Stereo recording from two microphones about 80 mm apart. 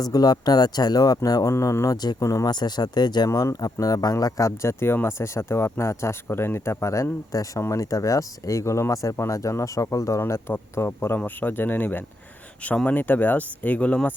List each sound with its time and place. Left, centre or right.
0.0 s speech: left
2.5 s speech: left
3.2 s speech: left; by 14.1 s centre